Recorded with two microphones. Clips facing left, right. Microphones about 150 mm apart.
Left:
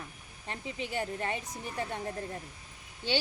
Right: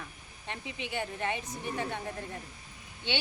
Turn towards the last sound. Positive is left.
turn(degrees=40)  # may be behind; listen again after turning